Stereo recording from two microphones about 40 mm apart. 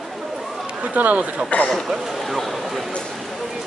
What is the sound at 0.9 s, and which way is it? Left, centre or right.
Speech, right.